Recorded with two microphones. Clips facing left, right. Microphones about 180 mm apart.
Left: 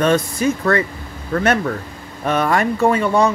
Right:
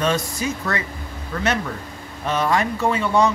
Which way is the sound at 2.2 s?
55° left (ahead or behind).